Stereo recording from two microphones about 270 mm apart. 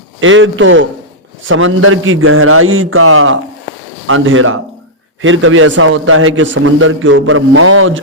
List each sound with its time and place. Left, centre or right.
0.2 s a man's voice: right